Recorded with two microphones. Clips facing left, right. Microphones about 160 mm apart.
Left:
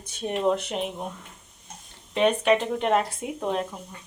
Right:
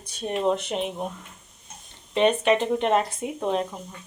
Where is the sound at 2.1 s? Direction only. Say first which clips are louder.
Right 1 dB; centre (ahead or behind).